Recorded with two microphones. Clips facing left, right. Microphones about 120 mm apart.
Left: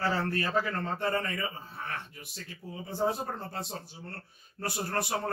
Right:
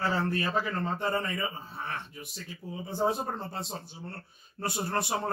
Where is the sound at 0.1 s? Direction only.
20° right (ahead or behind).